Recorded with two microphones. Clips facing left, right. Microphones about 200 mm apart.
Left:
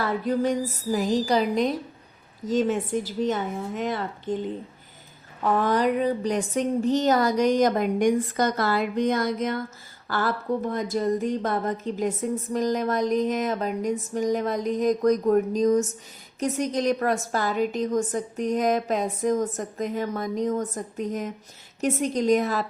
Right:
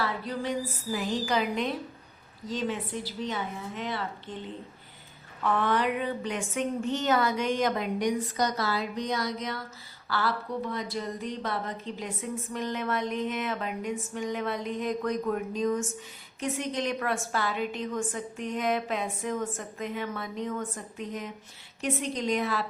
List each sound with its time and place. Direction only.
0.0 s a woman's voice: 45° left (ahead or behind)
5.4 s a woman's voice: 40° left (ahead or behind)